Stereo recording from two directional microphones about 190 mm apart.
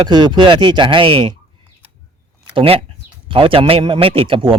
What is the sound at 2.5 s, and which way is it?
Speech, 30° right (ahead or behind).